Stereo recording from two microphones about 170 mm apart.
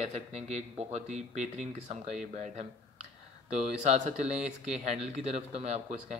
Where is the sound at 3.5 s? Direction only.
40° right (ahead or behind).